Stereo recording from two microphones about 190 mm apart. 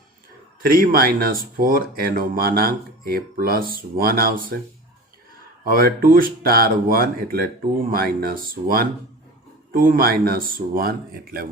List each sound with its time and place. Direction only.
0.6 s speech: 50° right (ahead or behind)
5.6 s speech: 50° right (ahead or behind)